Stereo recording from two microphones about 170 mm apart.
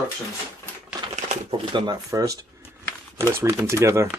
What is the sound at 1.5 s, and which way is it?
Speech, 25° right (ahead or behind).